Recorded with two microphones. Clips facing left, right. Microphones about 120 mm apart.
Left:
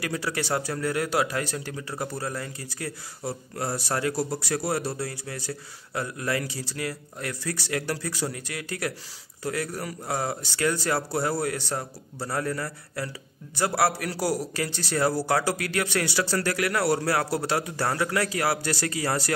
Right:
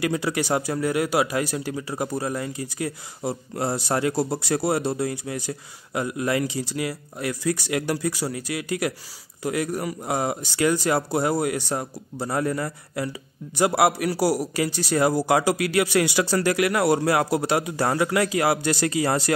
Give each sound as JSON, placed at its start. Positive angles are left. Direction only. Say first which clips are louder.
{"t": 0.0, "sound": "a man's voice", "louder": "right 5 dB", "side_deg": -20}